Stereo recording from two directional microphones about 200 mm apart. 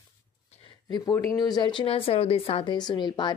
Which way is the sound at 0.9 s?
20° left (ahead or behind).